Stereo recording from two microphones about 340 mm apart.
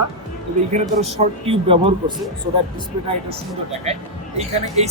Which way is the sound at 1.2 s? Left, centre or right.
Centre.